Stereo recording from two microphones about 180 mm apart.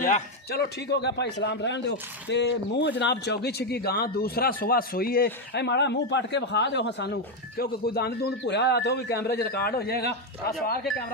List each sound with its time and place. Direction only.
0.0 s a man's voice: 60° left (ahead or behind)